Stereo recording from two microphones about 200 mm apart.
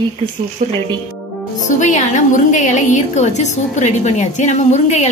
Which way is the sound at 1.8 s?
40° left (ahead or behind).